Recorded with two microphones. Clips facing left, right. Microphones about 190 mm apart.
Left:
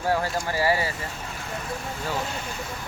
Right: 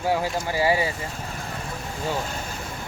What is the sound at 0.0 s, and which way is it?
Speech, 10° right (ahead or behind).